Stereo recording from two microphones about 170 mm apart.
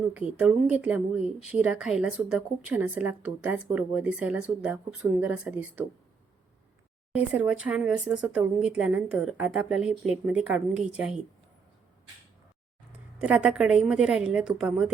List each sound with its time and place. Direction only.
0.0 s speech: 5° right (ahead or behind)
7.1 s speech: 10° right (ahead or behind)
13.1 s a woman's voice: 5° right (ahead or behind)